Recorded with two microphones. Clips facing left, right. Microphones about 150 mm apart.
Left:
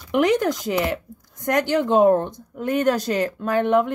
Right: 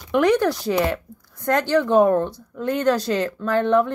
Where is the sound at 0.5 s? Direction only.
20° left (ahead or behind).